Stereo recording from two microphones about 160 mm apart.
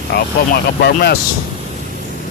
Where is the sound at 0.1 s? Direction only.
80° left.